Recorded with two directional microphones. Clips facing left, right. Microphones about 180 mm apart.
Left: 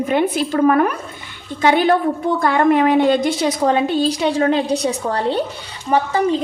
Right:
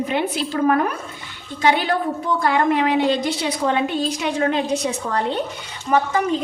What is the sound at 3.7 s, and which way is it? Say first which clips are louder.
A woman's voice: left 4 dB; 35° left (ahead or behind).